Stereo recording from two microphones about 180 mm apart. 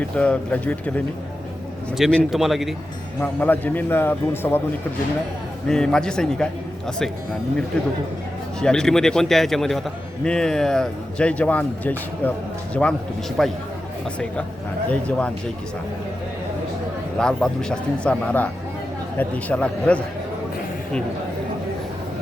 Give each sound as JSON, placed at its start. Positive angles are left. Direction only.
{"t": 0.2, "sound": "a man's voice", "side_deg": 5}
{"t": 3.2, "sound": "a man's voice", "side_deg": 10}
{"t": 5.6, "sound": "a man's voice", "side_deg": 5}
{"t": 8.6, "sound": "a man's voice", "side_deg": 5}
{"t": 13.4, "sound": "a man's voice", "side_deg": 0}
{"t": 14.8, "sound": "a man's voice", "side_deg": 5}
{"t": 17.2, "sound": "a man's voice", "side_deg": 5}